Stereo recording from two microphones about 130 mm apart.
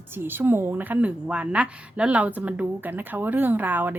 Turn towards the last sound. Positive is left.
turn(degrees=-15)  # may be behind; listen again after turning